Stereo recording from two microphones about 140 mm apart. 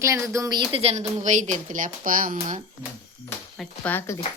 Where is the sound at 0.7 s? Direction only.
45° right (ahead or behind).